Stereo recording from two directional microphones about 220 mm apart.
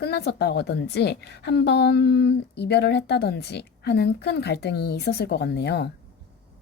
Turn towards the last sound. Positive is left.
turn(degrees=50)  # may be behind; listen again after turning